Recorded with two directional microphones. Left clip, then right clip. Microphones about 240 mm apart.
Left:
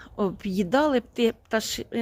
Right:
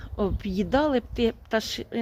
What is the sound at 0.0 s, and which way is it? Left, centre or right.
A woman's voice, centre.